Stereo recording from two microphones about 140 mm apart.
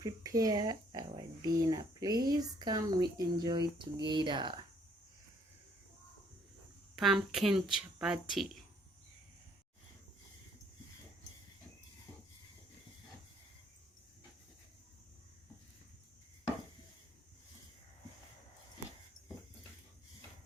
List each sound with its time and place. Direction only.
0.0 s speech: 25° right (ahead or behind)
6.9 s speech: centre (ahead or behind)